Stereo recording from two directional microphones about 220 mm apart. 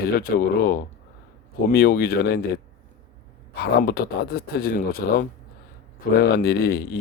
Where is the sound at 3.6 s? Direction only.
45° left (ahead or behind).